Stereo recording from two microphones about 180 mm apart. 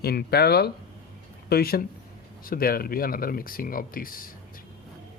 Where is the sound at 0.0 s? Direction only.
60° left (ahead or behind).